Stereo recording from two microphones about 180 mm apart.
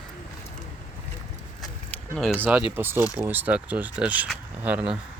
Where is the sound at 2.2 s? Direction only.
Centre (ahead or behind).